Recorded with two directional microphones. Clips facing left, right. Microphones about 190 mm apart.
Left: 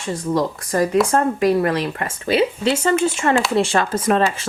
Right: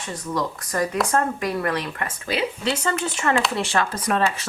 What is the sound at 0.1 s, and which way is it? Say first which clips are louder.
Speech: left 7 dB; 25° left (ahead or behind).